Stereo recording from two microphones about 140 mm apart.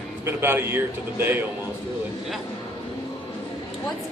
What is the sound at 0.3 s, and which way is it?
A man's voice, 15° right (ahead or behind).